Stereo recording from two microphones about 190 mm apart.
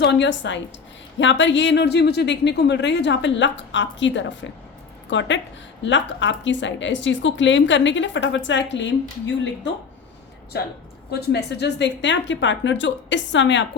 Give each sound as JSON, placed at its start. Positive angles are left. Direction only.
{"t": 0.0, "sound": "a woman's voice", "side_deg": 70}
{"t": 11.1, "sound": "a woman's voice", "side_deg": 60}